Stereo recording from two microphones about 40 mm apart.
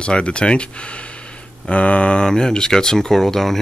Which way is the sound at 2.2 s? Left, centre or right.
Centre.